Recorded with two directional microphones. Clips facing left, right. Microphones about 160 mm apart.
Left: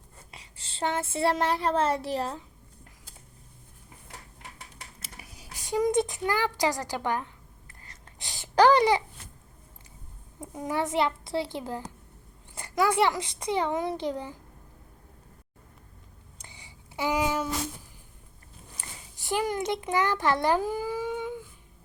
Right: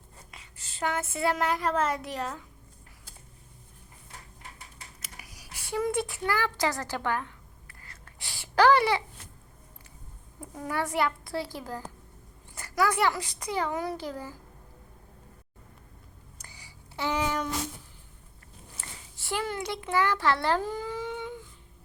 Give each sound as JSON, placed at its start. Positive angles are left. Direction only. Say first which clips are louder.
{"t": 0.3, "sound": "speech", "louder": "left 1 dB", "side_deg": 30}
{"t": 4.9, "sound": "a sound", "louder": "left 2 dB", "side_deg": 25}
{"t": 10.5, "sound": "a child's voice", "louder": "left 2 dB", "side_deg": 20}
{"t": 16.4, "sound": "a sound", "louder": "left 2 dB", "side_deg": 25}
{"t": 17.0, "sound": "speech", "louder": "left 2 dB", "side_deg": 10}
{"t": 18.8, "sound": "a child's voice", "louder": "left 1 dB", "side_deg": 15}